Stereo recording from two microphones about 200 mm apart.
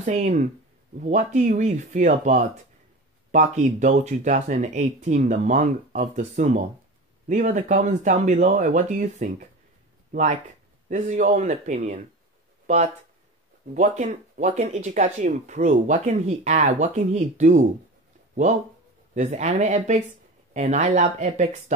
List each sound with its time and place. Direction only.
0.0 s speech: 35° right (ahead or behind)
19.1 s speech: 35° right (ahead or behind)